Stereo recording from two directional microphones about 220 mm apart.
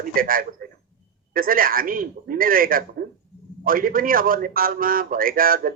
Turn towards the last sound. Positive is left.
turn(degrees=-40)  # may be behind; listen again after turning